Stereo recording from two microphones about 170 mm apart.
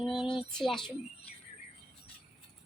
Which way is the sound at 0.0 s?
Centre (ahead or behind).